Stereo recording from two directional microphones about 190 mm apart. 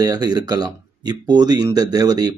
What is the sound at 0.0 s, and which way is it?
Speech, 20° right (ahead or behind).